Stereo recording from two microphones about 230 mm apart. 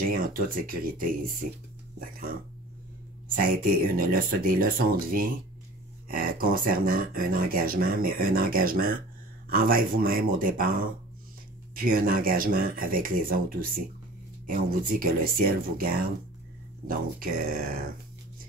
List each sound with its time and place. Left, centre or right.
0.0 s speech: right
3.8 s speech: right
11.7 s speech: right